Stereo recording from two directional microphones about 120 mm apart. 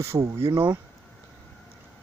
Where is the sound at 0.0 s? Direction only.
25° right (ahead or behind).